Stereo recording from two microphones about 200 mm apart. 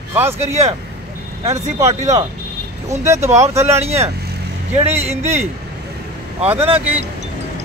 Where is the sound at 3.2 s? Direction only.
35° right (ahead or behind).